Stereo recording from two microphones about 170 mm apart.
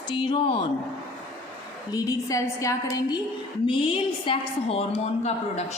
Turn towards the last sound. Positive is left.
turn(degrees=40)  # may be behind; listen again after turning